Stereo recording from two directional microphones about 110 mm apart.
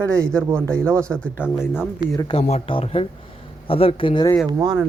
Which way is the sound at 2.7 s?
60° left (ahead or behind).